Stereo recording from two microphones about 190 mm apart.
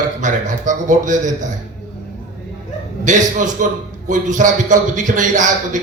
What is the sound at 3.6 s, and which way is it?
A man's voice, 45° right (ahead or behind).